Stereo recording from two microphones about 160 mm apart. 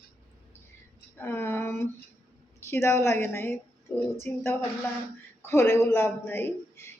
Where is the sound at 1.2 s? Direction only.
15° left (ahead or behind).